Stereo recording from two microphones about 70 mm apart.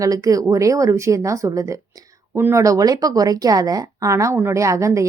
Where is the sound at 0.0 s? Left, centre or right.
Right.